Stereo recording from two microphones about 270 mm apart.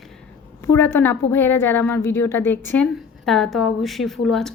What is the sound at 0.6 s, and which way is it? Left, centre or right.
A woman's voice, centre.